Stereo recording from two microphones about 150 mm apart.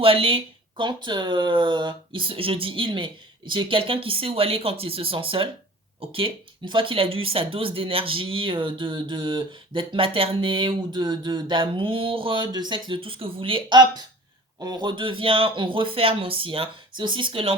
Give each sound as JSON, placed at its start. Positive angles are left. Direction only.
{"t": 0.0, "sound": "speech", "side_deg": -40}